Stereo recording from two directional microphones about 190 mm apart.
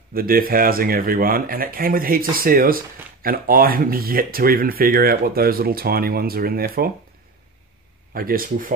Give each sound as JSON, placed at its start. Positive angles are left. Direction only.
{"t": 0.1, "sound": "speech", "side_deg": -50}
{"t": 8.1, "sound": "speech", "side_deg": -50}